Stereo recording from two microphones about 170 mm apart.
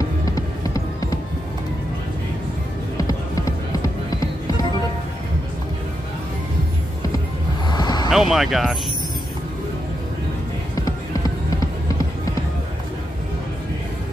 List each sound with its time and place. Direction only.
3.0 s music: 20° left (ahead or behind)
7.7 s vehicle: 25° left (ahead or behind)
8.1 s speech: centre (ahead or behind)